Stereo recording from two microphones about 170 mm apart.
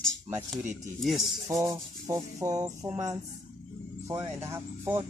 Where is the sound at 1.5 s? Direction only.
20° right (ahead or behind).